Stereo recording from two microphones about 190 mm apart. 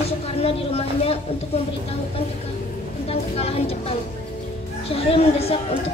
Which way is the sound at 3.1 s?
30° left (ahead or behind).